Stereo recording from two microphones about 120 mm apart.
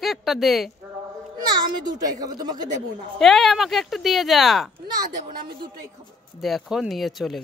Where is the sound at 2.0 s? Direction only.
30° right (ahead or behind).